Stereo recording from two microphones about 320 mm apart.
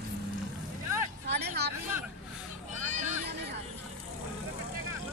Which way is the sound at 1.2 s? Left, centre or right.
Right.